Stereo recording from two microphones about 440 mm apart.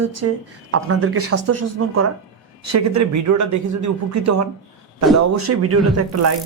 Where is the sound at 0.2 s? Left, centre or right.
Right.